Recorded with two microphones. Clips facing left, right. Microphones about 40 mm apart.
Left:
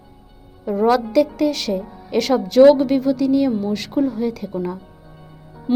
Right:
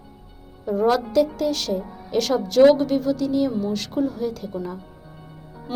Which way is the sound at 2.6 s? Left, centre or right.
Left.